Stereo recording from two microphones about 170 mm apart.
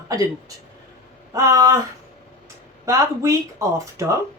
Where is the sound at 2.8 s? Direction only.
20° right (ahead or behind).